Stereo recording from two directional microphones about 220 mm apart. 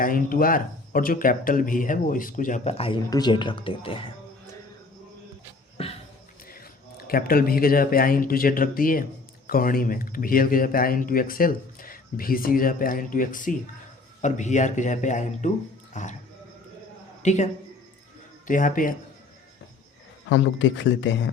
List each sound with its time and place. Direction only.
0.0 s speech: 40° left (ahead or behind); by 4.1 s 25° left (ahead or behind)
5.7 s a sound: 25° left (ahead or behind)
6.5 s speech: 40° left (ahead or behind)
17.2 s speech: 30° left (ahead or behind)
20.3 s speech: 55° left (ahead or behind)